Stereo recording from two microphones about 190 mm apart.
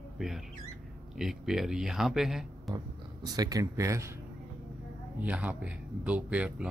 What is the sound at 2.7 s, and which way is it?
Speech, 20° right (ahead or behind).